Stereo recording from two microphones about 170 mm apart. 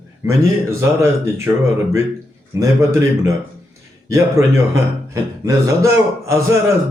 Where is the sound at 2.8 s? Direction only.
15° right (ahead or behind).